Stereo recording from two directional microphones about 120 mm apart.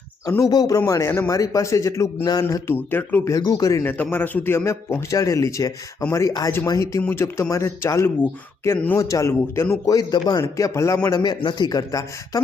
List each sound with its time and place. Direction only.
0.3 s speech: 30° left (ahead or behind)
3.8 s speech: 15° left (ahead or behind)
9.0 s a man's voice: 25° left (ahead or behind)